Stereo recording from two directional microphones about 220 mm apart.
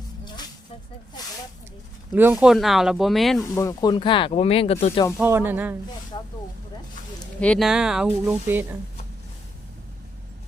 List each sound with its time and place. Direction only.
2.1 s speech: 5° right (ahead or behind)
3.5 s speech: 15° left (ahead or behind)
5.1 s speech: 10° right (ahead or behind)
7.3 s speech: 5° left (ahead or behind)